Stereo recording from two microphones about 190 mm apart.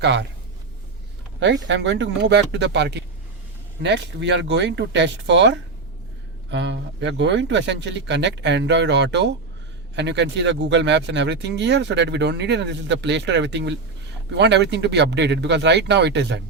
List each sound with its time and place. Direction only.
0.0 s speech: 65° right (ahead or behind)
1.6 s speech: 70° right (ahead or behind)